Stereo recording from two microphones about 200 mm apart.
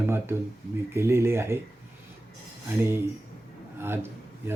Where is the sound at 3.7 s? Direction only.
10° right (ahead or behind).